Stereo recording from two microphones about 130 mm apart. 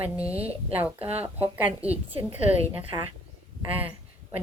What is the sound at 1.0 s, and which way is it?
Speech, 50° right (ahead or behind).